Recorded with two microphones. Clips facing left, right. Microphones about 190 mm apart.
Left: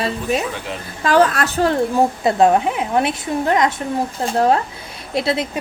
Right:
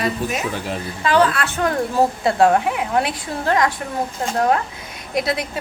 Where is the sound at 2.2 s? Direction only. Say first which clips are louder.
Left 2 dB; 20° left (ahead or behind).